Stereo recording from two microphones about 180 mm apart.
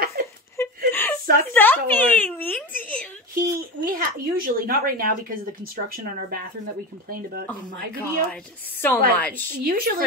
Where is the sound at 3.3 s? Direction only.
55° right (ahead or behind).